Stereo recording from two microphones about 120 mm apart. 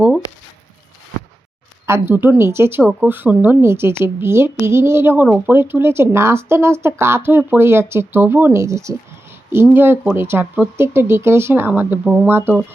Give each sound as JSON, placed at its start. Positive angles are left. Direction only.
{"t": 1.9, "sound": "speech", "side_deg": -15}